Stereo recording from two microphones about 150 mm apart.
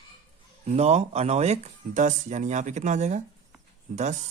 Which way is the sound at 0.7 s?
45° right (ahead or behind).